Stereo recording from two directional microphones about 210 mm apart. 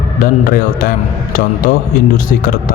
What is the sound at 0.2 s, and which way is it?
Speech, 40° left (ahead or behind).